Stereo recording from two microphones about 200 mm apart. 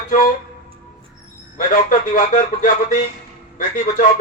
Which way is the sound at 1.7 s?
40° left (ahead or behind).